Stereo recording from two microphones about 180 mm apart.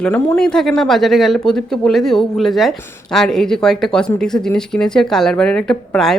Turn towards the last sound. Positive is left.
turn(degrees=5)  # may be behind; listen again after turning